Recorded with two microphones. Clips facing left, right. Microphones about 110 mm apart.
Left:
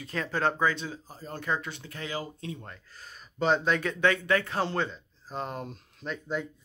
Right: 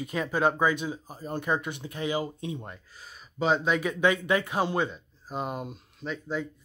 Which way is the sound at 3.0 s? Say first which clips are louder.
Even; 5° right (ahead or behind).